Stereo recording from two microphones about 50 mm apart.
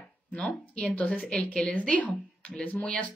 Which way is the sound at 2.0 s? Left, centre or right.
Left.